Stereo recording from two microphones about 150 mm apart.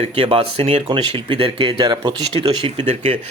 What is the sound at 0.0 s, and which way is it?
A man's voice, 40° right (ahead or behind).